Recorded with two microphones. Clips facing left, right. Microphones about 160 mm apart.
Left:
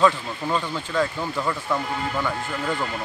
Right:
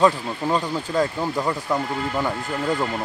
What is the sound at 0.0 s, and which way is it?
Speech, 20° right (ahead or behind).